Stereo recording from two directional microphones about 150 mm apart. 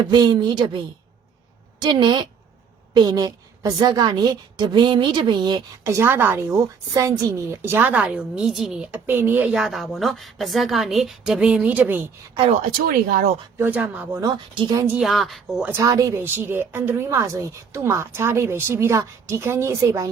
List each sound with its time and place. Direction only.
0.1 s a woman's voice: 30° right (ahead or behind)
1.8 s a woman's voice: 30° right (ahead or behind); by 12.0 s 10° right (ahead or behind)
12.8 s speech: 80° right
13.6 s a woman's voice: 10° right (ahead or behind)
14.2 s a woman's voice: 25° right (ahead or behind)
14.8 s a woman's voice: 5° right (ahead or behind)
15.7 s a woman's voice: 20° right (ahead or behind)